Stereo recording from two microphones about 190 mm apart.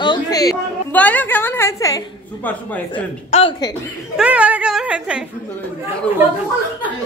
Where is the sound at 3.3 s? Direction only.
30° left (ahead or behind).